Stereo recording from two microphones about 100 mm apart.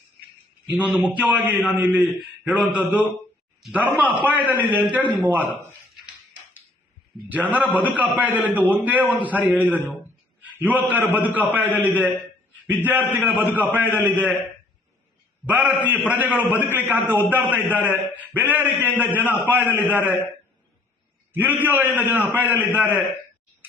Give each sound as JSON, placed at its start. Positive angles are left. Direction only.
{"t": 0.7, "sound": "a man's voice", "side_deg": -10}
{"t": 7.3, "sound": "a man's voice", "side_deg": -15}
{"t": 15.4, "sound": "a man's voice", "side_deg": -15}
{"t": 21.3, "sound": "a man's voice", "side_deg": -20}